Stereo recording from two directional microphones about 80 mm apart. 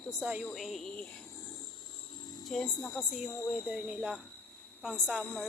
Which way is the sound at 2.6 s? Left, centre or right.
Left.